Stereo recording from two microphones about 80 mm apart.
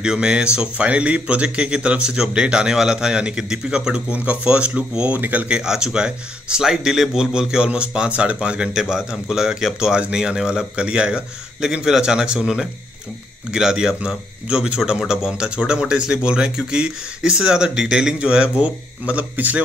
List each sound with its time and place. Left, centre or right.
0.0 s a man's voice: centre